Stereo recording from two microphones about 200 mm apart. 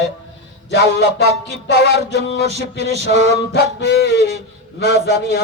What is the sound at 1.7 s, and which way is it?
Music, 55° left (ahead or behind).